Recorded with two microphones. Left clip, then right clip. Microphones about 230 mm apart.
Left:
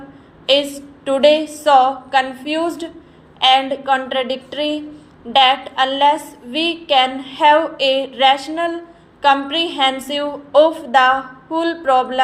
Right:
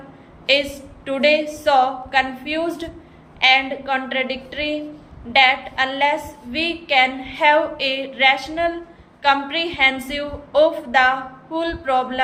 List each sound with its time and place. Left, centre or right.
0.4 s a woman's voice: centre